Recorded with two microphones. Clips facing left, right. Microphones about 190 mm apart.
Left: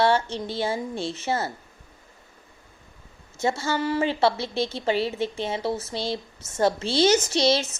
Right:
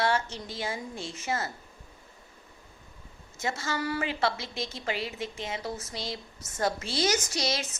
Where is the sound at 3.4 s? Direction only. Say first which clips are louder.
Left 7 dB; 30° left (ahead or behind).